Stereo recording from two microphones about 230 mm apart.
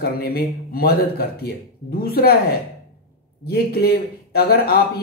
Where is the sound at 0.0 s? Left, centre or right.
Left.